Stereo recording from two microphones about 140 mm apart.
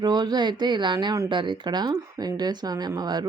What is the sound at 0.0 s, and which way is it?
Speech, 30° right (ahead or behind).